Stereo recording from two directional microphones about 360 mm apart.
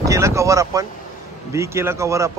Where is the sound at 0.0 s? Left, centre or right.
Centre.